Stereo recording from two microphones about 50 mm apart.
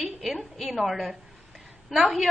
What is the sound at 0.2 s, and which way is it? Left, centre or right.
Speech, centre.